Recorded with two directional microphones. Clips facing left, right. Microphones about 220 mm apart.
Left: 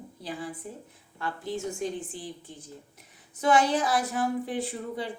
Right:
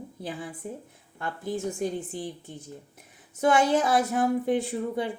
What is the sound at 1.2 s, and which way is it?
A woman's voice, 50° right (ahead or behind).